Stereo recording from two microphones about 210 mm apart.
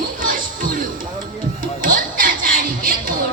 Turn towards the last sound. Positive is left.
turn(degrees=-40)  # may be behind; listen again after turning